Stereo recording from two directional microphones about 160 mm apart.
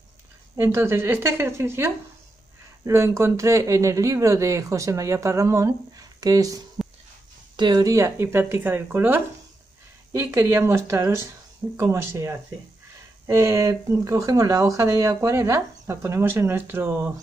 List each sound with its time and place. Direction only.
0.6 s speech: 15° right (ahead or behind)